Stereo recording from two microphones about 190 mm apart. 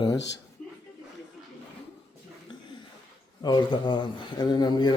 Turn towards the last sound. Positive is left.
turn(degrees=20)  # may be behind; listen again after turning